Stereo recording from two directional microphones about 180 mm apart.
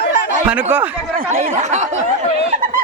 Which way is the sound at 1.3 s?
40° right (ahead or behind).